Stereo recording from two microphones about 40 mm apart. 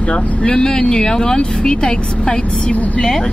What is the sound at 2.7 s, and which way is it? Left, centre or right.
Speech, left.